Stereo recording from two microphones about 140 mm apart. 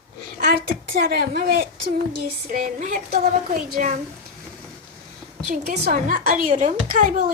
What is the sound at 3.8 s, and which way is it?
Speech, 65° right (ahead or behind).